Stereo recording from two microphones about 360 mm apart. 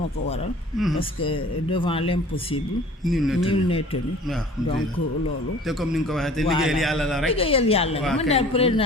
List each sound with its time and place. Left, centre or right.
0.9 s speech: centre
3.0 s a man's voice: centre
3.4 s speech: centre
5.6 s a man's voice: centre
7.3 s speech: centre
8.0 s a man's voice: centre
8.3 s speech: centre